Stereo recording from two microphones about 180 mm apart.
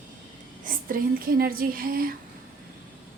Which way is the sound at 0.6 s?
50° right (ahead or behind).